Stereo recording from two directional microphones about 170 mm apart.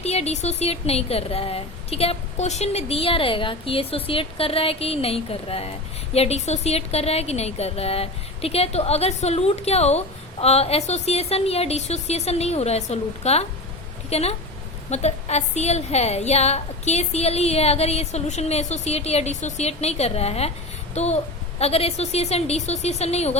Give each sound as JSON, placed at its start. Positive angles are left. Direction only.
{"t": 0.0, "sound": "a child's voice", "side_deg": 40}